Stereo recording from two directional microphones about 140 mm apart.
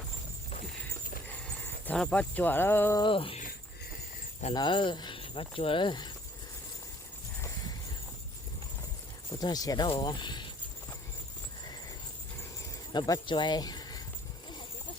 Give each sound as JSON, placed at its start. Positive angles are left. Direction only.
{"t": 1.6, "sound": "speech", "side_deg": 10}
{"t": 3.0, "sound": "speech", "side_deg": 40}
{"t": 4.5, "sound": "speech", "side_deg": 35}
{"t": 9.4, "sound": "speech", "side_deg": 30}
{"t": 12.9, "sound": "speech", "side_deg": 35}